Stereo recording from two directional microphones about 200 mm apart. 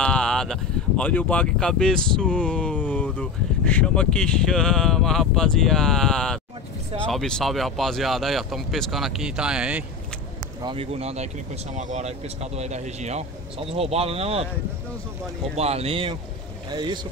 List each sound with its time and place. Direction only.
0.0 s speech: 5° left (ahead or behind)
10.6 s speech: 25° right (ahead or behind)
15.5 s speech: 30° right (ahead or behind)